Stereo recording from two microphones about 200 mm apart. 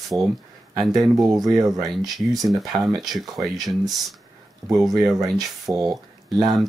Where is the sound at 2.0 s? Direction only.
Centre (ahead or behind).